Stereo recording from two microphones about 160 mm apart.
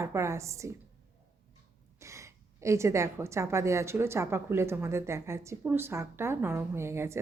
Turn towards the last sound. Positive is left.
turn(degrees=-15)  # may be behind; listen again after turning